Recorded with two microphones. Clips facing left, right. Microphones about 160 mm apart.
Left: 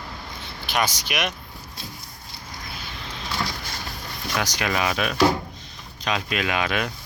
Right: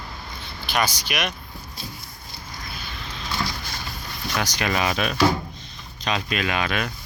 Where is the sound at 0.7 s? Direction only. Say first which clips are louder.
Even; 15° left (ahead or behind).